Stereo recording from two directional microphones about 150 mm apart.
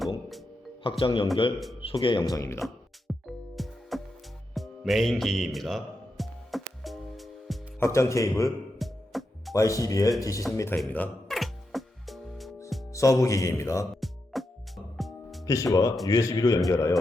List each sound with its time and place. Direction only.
0.8 s speech: 35° left (ahead or behind)
3.2 s music: centre (ahead or behind)
7.8 s speech: 20° left (ahead or behind)
8.8 s music: centre (ahead or behind)
9.6 s speech: 20° left (ahead or behind)
10.8 s music: 5° left (ahead or behind)
12.9 s speech: 20° left (ahead or behind)
14.3 s music: centre (ahead or behind)
15.4 s speech: 20° left (ahead or behind)